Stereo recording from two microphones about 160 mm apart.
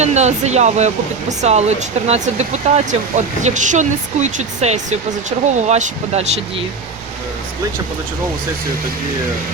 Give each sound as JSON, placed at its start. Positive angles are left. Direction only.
{"t": 0.0, "sound": "speech", "side_deg": -45}